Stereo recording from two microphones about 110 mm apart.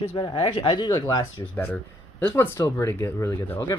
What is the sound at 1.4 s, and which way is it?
Speech, 15° left (ahead or behind).